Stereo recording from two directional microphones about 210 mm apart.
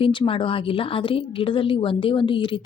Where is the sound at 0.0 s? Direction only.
25° left (ahead or behind).